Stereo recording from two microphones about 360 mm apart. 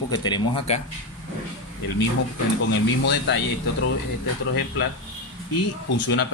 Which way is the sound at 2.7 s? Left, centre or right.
Left.